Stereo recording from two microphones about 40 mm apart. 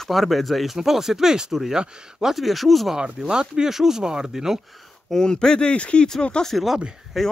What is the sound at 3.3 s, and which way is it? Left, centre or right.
Speech, centre.